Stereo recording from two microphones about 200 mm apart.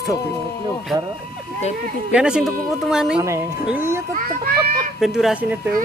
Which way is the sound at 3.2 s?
15° right (ahead or behind).